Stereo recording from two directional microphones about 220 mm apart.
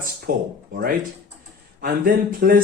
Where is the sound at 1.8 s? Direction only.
40° right (ahead or behind).